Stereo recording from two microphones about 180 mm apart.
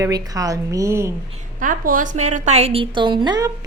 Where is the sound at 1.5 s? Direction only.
50° right (ahead or behind).